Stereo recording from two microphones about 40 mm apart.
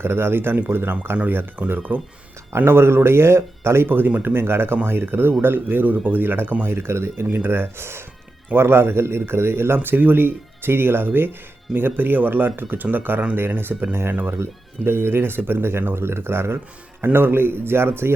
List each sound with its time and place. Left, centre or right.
0.0 s speech: right
1.6 s speech: right
2.6 s speech: right
4.2 s speech: right
6.7 s speech: right
14.3 s speech: right
16.0 s speech: right
17.0 s speech: right